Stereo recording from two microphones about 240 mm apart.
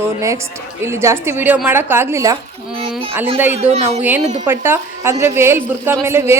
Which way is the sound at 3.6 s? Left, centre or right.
Right.